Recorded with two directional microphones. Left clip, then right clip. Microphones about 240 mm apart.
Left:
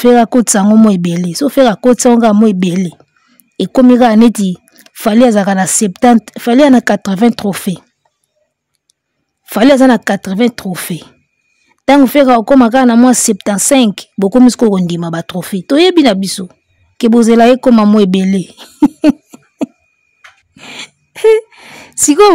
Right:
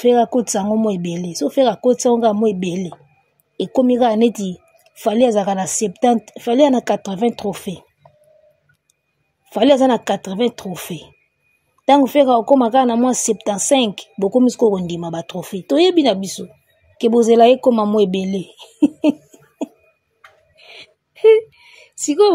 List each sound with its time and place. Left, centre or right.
0.0 s a woman's voice: left
9.5 s a woman's voice: left
20.6 s a sound: left